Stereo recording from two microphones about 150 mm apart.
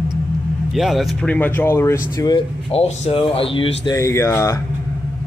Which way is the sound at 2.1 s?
25° left (ahead or behind).